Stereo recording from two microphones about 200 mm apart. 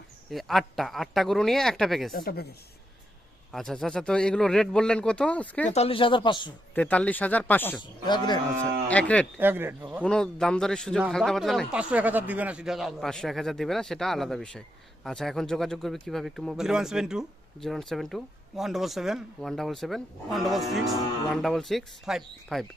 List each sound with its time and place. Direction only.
0.3 s speech: centre (ahead or behind)
2.1 s speech: 50° left (ahead or behind)
3.5 s speech: centre (ahead or behind)
5.7 s speech: 30° left (ahead or behind)
6.7 s speech: 5° left (ahead or behind)
7.8 s speech: 20° left (ahead or behind)
8.9 s speech: 5° left (ahead or behind)
9.4 s speech: 10° right (ahead or behind)
10.0 s speech: 5° left (ahead or behind)